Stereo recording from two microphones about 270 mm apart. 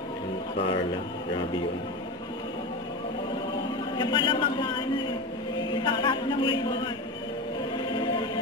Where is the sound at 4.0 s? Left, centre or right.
Centre.